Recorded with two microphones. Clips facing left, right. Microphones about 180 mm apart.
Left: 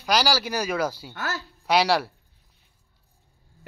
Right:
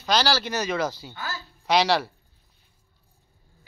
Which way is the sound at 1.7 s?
5° left (ahead or behind).